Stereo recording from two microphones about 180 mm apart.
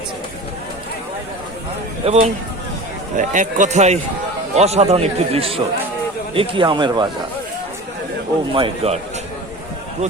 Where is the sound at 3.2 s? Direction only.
45° right (ahead or behind); by 7.1 s 25° right (ahead or behind).